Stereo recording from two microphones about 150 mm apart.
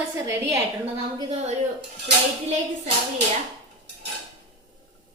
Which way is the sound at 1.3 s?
45° right (ahead or behind).